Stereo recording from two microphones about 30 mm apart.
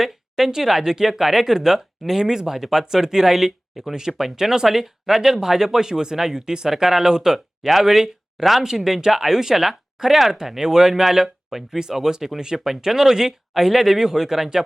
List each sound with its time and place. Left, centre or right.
0.0 s a woman's voice: centre
7.6 s speech: centre